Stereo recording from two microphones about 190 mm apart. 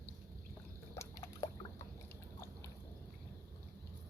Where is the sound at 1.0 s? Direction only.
15° left (ahead or behind).